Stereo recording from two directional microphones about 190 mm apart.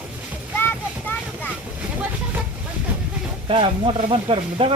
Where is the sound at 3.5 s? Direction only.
25° right (ahead or behind).